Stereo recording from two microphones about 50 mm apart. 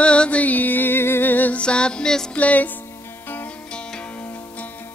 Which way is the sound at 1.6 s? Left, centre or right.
Centre.